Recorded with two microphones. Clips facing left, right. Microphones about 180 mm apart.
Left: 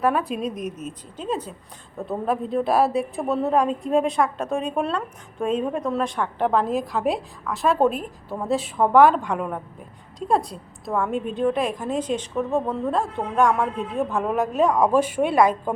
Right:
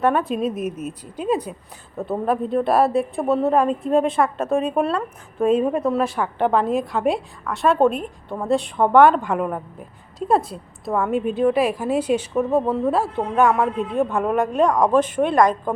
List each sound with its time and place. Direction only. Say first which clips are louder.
0.0 s a woman's voice: right 3 dB; centre (ahead or behind)
2.0 s a woman's voice: right 3 dB; centre (ahead or behind)